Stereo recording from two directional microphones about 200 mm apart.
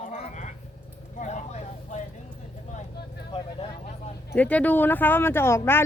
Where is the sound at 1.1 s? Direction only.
35° left (ahead or behind).